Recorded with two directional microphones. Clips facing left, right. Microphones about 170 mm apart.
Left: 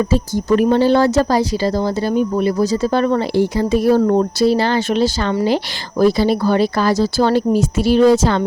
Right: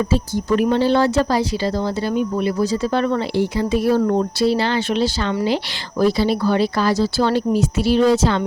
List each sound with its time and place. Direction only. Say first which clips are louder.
0.1 s speech: left 3 dB; 45° left (ahead or behind)